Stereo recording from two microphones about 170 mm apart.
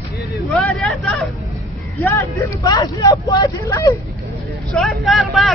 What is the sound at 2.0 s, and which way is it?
Speech, 20° left (ahead or behind).